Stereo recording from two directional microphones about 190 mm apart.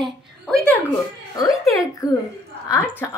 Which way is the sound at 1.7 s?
15° left (ahead or behind).